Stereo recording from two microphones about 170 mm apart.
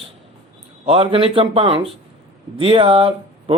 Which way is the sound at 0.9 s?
30° right (ahead or behind).